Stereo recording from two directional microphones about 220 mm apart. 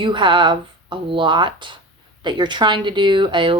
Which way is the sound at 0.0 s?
20° right (ahead or behind).